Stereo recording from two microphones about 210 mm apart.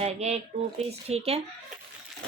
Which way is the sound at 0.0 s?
30° right (ahead or behind).